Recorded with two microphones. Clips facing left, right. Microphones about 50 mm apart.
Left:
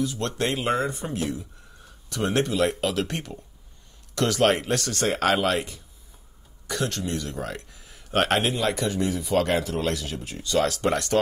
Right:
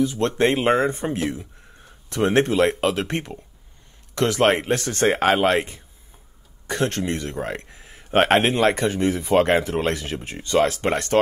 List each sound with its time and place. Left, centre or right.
0.0 s speech: right